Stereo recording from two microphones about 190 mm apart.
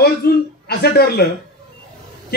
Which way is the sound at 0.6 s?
60° left (ahead or behind).